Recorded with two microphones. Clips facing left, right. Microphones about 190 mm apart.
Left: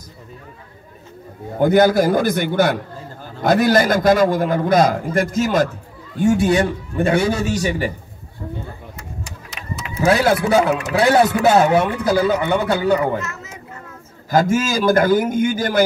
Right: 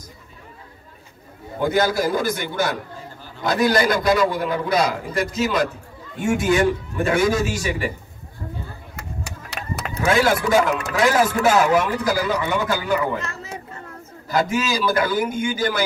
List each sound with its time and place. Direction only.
1.6 s a man's voice: 55° left (ahead or behind)
6.1 s a man's voice: 35° left (ahead or behind)
8.9 s a sound: 65° right (ahead or behind)
9.6 s a sound: 45° right (ahead or behind)
10.0 s a man's voice: 35° left (ahead or behind)
13.2 s speech: 30° right (ahead or behind)
14.3 s a man's voice: 45° left (ahead or behind)